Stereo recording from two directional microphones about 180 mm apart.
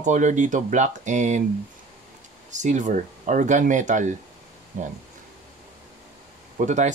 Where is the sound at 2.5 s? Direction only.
40° right (ahead or behind).